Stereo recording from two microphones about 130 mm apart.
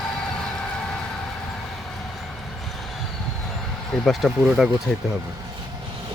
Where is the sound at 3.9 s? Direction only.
Centre (ahead or behind).